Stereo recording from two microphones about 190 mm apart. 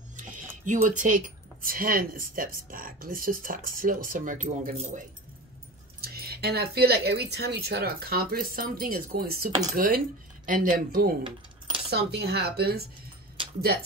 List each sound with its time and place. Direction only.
0.1 s a sound: 40° right (ahead or behind)
0.8 s speech: 45° right (ahead or behind)
5.9 s speech: 55° right (ahead or behind)
11.2 s coin: 25° right (ahead or behind)
11.9 s speech: 60° right (ahead or behind)